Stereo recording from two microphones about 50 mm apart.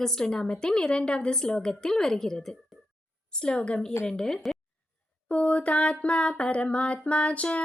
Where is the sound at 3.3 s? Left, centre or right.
Centre.